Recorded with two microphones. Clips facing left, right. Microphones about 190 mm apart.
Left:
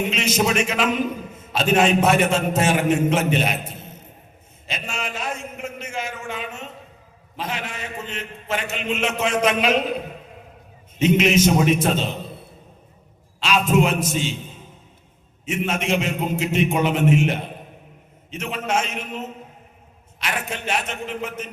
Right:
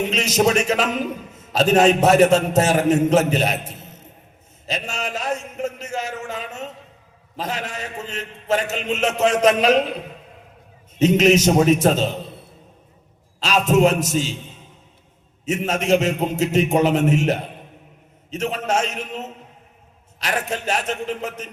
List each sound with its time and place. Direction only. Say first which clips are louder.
0.1 s a man's voice: right 3 dB; 40° right (ahead or behind)
11.0 s a man's voice: right 2 dB; 40° right (ahead or behind)
13.4 s a man's voice: right 3 dB; 40° right (ahead or behind)
15.4 s a man's voice: right 4 dB; 40° right (ahead or behind)